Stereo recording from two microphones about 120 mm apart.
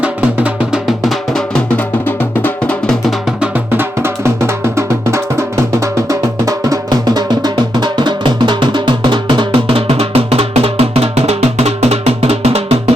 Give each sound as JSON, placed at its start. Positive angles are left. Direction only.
{"t": 0.0, "sound": "music", "side_deg": -10}
{"t": 3.4, "sound": "music", "side_deg": -20}